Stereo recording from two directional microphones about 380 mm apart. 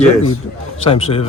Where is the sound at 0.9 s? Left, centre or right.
Centre.